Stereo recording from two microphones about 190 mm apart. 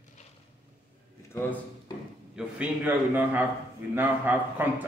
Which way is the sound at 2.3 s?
5° right (ahead or behind).